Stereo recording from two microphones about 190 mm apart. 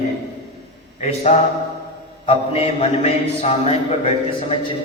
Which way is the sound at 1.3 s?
35° left (ahead or behind).